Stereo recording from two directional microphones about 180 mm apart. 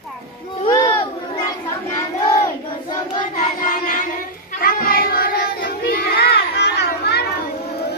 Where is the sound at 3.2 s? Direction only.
45° left (ahead or behind).